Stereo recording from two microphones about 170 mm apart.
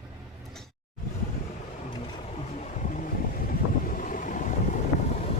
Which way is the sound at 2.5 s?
45° left (ahead or behind).